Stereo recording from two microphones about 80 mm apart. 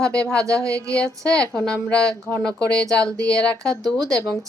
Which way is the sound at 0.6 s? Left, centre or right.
Right.